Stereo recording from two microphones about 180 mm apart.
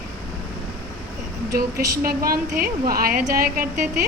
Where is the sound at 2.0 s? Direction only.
55° right (ahead or behind).